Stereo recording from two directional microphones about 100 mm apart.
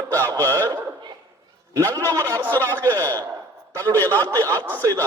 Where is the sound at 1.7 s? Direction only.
35° right (ahead or behind).